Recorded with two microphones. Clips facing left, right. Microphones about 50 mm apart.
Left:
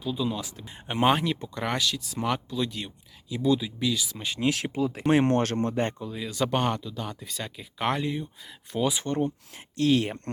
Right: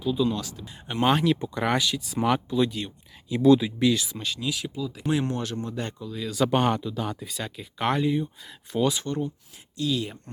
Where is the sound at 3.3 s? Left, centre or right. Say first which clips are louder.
Right 6 dB; right.